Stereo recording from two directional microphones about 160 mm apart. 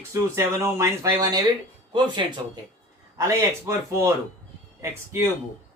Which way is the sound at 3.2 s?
20° right (ahead or behind).